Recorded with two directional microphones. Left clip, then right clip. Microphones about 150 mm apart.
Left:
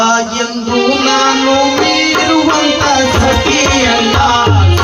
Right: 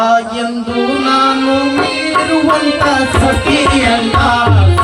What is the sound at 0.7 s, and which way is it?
Music, 25° right (ahead or behind).